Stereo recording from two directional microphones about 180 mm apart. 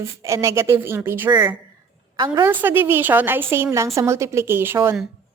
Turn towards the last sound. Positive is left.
turn(degrees=-15)  # may be behind; listen again after turning